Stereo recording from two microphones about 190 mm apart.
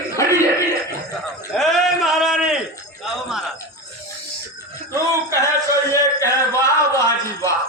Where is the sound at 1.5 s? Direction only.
Centre (ahead or behind).